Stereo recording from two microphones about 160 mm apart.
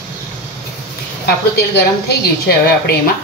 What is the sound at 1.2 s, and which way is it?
A woman's voice, 90° left.